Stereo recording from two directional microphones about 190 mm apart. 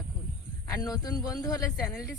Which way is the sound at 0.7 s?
20° left (ahead or behind).